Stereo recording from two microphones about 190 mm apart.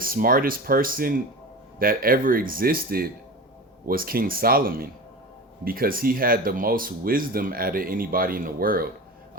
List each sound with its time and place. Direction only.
0.0 s speech: 50° right (ahead or behind)